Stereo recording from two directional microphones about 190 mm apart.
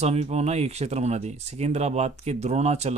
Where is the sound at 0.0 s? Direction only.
35° right (ahead or behind).